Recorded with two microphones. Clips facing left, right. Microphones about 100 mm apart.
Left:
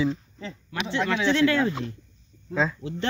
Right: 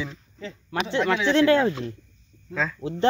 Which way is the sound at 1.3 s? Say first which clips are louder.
Right 4 dB; 30° right (ahead or behind).